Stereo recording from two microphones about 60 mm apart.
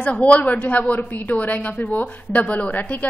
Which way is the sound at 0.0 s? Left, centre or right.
Left.